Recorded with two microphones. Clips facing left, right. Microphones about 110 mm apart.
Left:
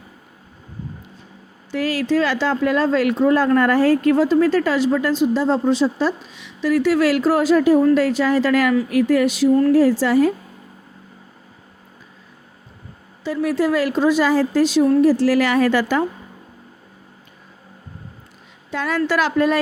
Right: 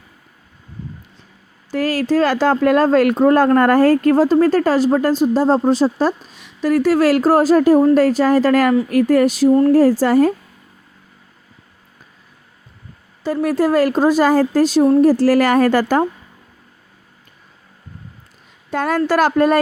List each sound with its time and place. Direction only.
1.7 s speech: 45° right (ahead or behind)
13.2 s speech: 45° right (ahead or behind)
18.7 s speech: 45° right (ahead or behind)